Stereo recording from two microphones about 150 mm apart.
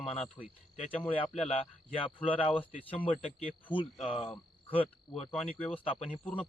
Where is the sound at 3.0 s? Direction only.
10° left (ahead or behind).